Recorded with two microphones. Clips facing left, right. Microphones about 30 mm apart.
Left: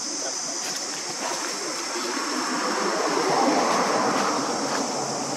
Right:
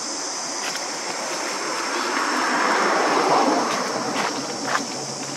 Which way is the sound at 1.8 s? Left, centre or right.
Right.